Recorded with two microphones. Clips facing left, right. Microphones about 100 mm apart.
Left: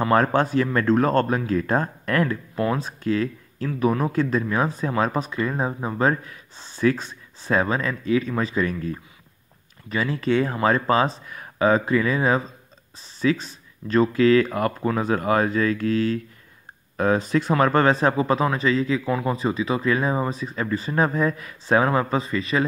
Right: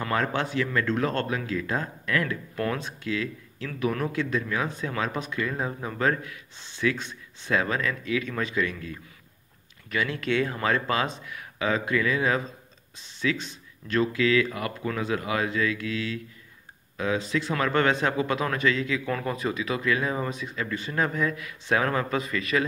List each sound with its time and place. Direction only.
0.1 s speech: 45° left (ahead or behind)
2.5 s speech: 25° left (ahead or behind)
2.8 s speech: 40° left (ahead or behind)
19.0 s speech: 15° left (ahead or behind)
19.3 s speech: 30° left (ahead or behind)